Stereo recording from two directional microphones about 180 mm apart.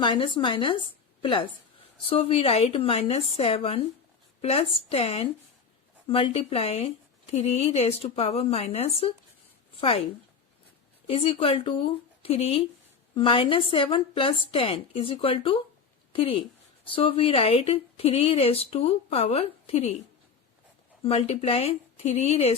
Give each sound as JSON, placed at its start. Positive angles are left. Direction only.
{"t": 0.0, "sound": "a woman's voice", "side_deg": 25}
{"t": 11.0, "sound": "speech", "side_deg": 35}
{"t": 21.0, "sound": "speech", "side_deg": 35}